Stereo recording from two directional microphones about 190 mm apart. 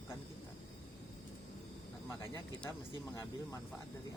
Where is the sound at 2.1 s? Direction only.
10° left (ahead or behind).